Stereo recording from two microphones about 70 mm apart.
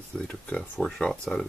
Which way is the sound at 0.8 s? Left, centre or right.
Centre.